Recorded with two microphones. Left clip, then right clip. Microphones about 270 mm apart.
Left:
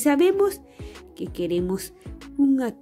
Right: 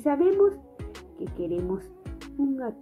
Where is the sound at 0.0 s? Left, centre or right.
Left.